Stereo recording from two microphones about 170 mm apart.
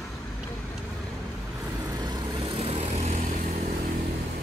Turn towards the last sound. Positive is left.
turn(degrees=-40)  # may be behind; listen again after turning